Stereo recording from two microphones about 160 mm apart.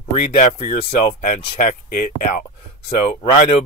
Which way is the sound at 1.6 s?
55° left (ahead or behind).